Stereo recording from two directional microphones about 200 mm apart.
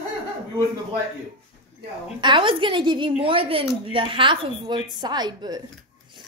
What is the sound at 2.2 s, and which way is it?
A woman's voice, 25° right (ahead or behind).